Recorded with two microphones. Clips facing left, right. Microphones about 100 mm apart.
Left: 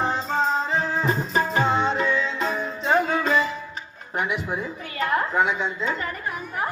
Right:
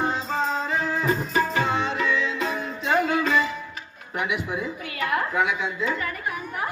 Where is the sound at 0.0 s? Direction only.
30° left (ahead or behind).